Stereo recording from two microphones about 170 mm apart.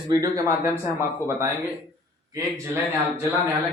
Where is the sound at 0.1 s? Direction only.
20° right (ahead or behind).